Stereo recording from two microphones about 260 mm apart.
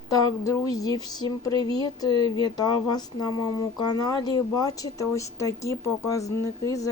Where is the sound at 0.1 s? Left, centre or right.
Centre.